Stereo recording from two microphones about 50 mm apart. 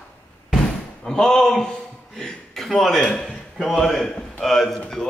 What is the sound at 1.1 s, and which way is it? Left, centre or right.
Speech, centre.